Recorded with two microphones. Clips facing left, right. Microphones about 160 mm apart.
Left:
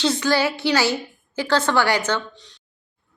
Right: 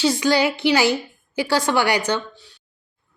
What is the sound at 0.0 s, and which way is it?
A woman's voice, 10° right (ahead or behind).